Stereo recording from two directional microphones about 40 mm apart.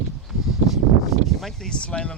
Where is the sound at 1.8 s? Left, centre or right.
Left.